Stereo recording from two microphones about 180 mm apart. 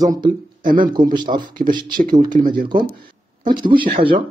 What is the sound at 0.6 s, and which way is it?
Speech, 50° right (ahead or behind).